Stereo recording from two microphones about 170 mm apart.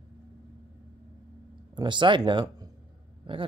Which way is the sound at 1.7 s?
30° right (ahead or behind).